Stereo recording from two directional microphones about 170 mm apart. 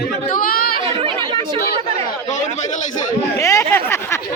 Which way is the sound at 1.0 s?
35° right (ahead or behind).